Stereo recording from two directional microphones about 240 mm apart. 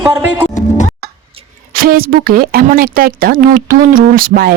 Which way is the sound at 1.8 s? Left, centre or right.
Right.